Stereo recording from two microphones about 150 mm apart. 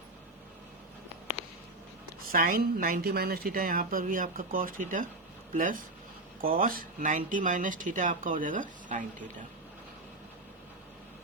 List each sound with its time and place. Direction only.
2.2 s a woman's voice: 70° right (ahead or behind)